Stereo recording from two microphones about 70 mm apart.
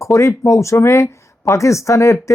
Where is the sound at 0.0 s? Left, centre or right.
Left.